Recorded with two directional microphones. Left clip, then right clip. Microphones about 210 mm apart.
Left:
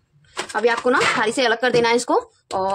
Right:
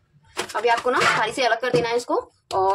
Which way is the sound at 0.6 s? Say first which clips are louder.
Left 1 dB; 35° left (ahead or behind).